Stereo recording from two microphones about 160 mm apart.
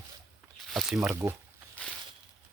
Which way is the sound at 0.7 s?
Centre (ahead or behind).